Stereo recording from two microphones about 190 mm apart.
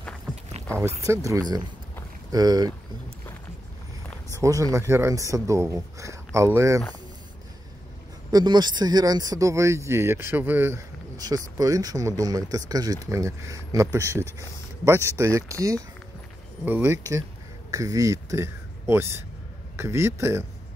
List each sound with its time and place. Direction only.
1.0 s speech: 15° right (ahead or behind)
4.3 s speech: 15° right (ahead or behind)
8.3 s a man's voice: 20° right (ahead or behind)